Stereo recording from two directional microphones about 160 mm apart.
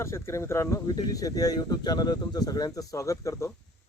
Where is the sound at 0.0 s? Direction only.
20° left (ahead or behind).